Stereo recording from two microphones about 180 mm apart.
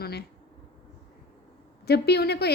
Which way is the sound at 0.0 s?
65° left (ahead or behind).